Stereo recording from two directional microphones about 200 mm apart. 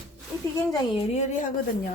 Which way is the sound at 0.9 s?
25° left (ahead or behind).